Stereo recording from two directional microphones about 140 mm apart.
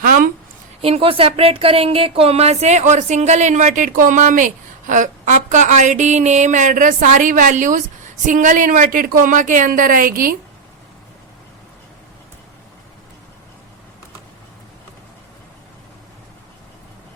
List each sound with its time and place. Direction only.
0.8 s a woman's voice: 45° right (ahead or behind); by 10.3 s 90° right